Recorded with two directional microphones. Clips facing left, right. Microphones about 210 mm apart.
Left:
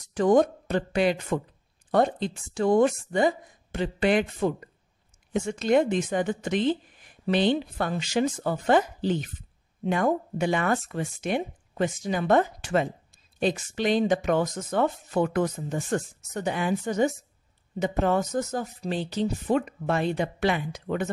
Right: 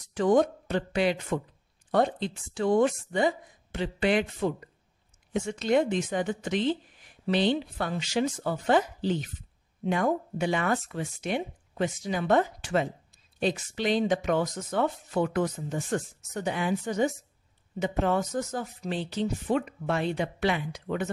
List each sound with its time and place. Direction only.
0.1 s speech: 45° left (ahead or behind)